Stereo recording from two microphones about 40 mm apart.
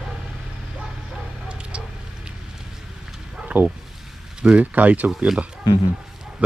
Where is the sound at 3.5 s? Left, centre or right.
Right.